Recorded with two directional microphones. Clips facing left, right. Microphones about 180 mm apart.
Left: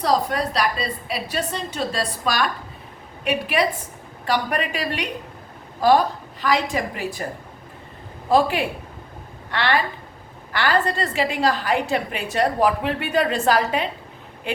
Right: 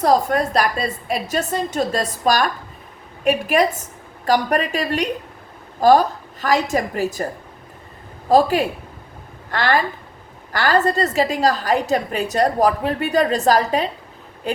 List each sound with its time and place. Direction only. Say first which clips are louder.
0.0 s a woman's voice: right 4 dB; 50° right (ahead or behind)
8.3 s a woman's voice: right 4 dB; 40° right (ahead or behind)